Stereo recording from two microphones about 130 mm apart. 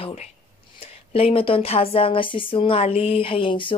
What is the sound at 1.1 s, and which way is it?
Speech, 45° left (ahead or behind).